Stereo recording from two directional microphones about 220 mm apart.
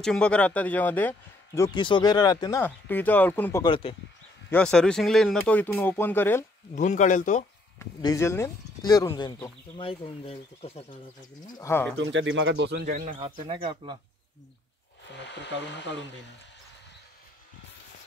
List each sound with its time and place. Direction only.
0.0 s a man's voice: 5° left (ahead or behind)
3.6 s speech: 25° left (ahead or behind)
4.5 s a man's voice: 5° left (ahead or behind)
6.7 s speech: 35° left (ahead or behind)
7.8 s a man's voice: 15° left (ahead or behind)
11.5 s a man's voice: 10° left (ahead or behind)
12.0 s speech: 55° right (ahead or behind); by 13.1 s 40° right (ahead or behind)
13.2 s speech: 20° right (ahead or behind)
15.1 s speech: 50° left (ahead or behind)